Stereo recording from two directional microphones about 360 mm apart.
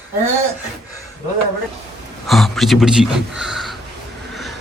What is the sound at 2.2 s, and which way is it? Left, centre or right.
Speech, centre.